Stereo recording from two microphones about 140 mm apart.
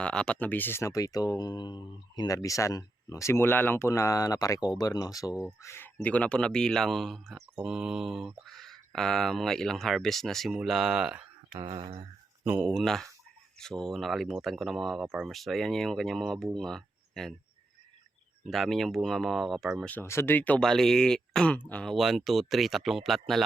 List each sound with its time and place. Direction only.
0.0 s speech: 5° left (ahead or behind)
11.6 s speech: 40° right (ahead or behind)
12.5 s speech: 5° right (ahead or behind)
18.4 s speech: centre (ahead or behind)
19.9 s speech: 15° left (ahead or behind); by 23.4 s centre (ahead or behind)